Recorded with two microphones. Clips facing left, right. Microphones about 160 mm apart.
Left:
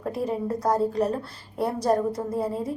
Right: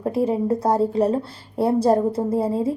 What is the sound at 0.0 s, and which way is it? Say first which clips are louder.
A woman's voice: right 6 dB; 25° right (ahead or behind).